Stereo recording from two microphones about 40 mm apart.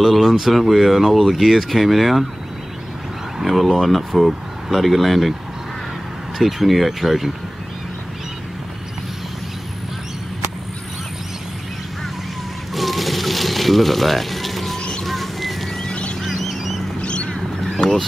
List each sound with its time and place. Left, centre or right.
0.0 s speech: centre
3.3 s speech: centre
6.3 s speech: centre
12.7 s music: centre
15.0 s bird: centre
15.9 s goose: left
16.3 s vehicle: centre
17.0 s a sound: left
17.3 s duck: left